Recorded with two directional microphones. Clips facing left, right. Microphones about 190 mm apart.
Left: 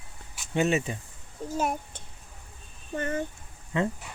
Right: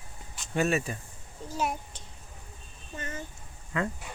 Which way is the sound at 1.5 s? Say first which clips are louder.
Left 3 dB; 50° left (ahead or behind).